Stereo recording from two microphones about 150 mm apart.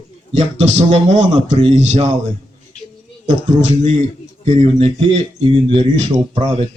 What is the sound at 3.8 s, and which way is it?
Speech, 50° right (ahead or behind).